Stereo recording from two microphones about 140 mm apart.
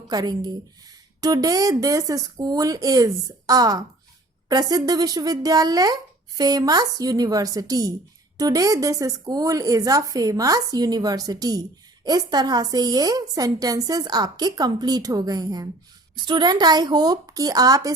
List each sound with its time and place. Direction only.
0.1 s a woman's voice: 30° right (ahead or behind)